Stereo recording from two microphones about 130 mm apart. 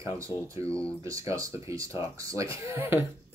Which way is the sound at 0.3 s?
30° left (ahead or behind).